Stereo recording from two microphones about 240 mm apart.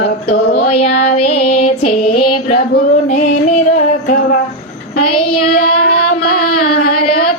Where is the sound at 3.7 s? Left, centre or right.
Left.